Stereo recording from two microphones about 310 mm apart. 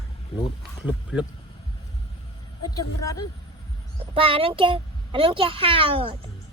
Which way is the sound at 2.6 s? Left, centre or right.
Centre.